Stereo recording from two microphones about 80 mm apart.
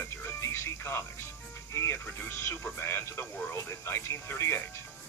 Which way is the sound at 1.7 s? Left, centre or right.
Left.